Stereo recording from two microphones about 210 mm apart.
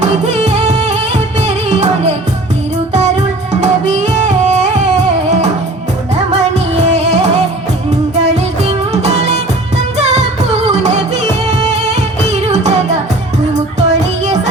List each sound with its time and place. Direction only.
0.0 s music: 35° right (ahead or behind)
2.9 s music: 30° right (ahead or behind)
6.8 s music: 35° right (ahead or behind)
10.0 s singing: 30° right (ahead or behind)
10.7 s music: 35° right (ahead or behind)